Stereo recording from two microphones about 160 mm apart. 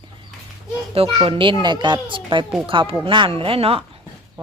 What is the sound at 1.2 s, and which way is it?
A child's voice, 30° right (ahead or behind).